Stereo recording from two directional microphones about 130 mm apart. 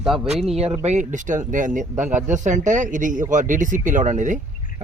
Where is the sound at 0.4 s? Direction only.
50° right (ahead or behind).